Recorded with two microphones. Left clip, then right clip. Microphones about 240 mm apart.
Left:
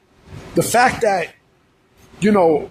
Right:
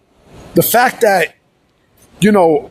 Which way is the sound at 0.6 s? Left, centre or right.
Right.